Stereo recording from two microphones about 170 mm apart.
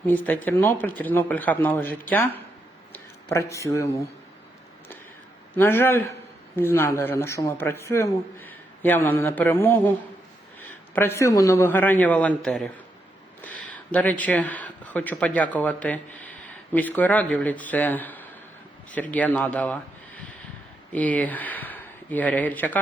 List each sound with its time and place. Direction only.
0.1 s a man's voice: 10° left (ahead or behind)
2.9 s a sound: 15° left (ahead or behind)
5.5 s a man's voice: 15° left (ahead or behind)
10.9 s a man's voice: 15° left (ahead or behind)
20.9 s speech: 10° left (ahead or behind)